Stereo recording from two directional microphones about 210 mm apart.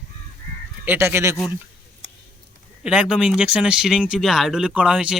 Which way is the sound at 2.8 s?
5° right (ahead or behind).